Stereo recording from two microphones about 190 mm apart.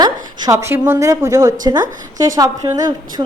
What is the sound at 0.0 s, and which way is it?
A woman's voice, 15° right (ahead or behind).